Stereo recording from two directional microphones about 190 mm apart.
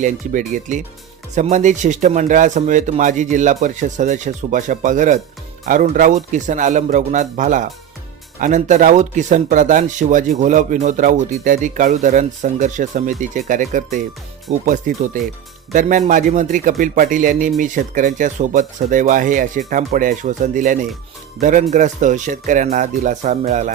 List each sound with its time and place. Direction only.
0.0 s speech: 45° right (ahead or behind)